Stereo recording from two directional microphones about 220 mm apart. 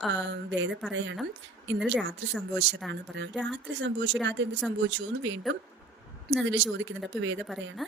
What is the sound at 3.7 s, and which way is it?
A woman's voice, 55° right (ahead or behind).